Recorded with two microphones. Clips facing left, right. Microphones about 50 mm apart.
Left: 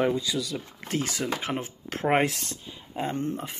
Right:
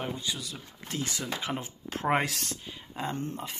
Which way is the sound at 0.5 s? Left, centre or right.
Left.